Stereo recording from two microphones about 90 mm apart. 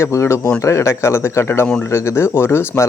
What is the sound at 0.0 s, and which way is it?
Speech, 30° left (ahead or behind).